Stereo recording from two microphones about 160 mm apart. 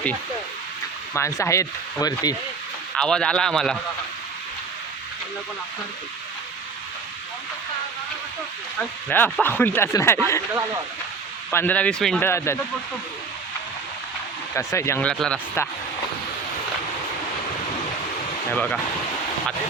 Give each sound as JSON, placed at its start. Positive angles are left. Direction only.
{"t": 1.1, "sound": "speech", "side_deg": 15}
{"t": 2.9, "sound": "speech", "side_deg": 5}
{"t": 9.0, "sound": "speech", "side_deg": 10}
{"t": 11.5, "sound": "speech", "side_deg": 10}
{"t": 12.2, "sound": "speech", "side_deg": 15}
{"t": 14.5, "sound": "speech", "side_deg": 15}
{"t": 18.5, "sound": "speech", "side_deg": 10}